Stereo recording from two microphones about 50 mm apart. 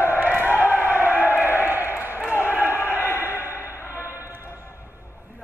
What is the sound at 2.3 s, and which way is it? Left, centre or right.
Basketball bounce, left.